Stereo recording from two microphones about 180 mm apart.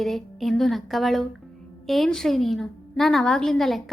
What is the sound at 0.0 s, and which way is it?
A woman's voice, centre (ahead or behind).